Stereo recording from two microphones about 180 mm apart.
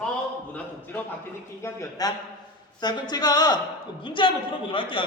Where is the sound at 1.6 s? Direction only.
20° left (ahead or behind).